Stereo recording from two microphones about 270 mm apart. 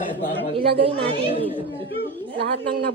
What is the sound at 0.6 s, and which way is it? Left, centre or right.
Speech, centre.